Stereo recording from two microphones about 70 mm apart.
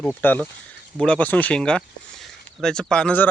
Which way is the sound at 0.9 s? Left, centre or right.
Centre.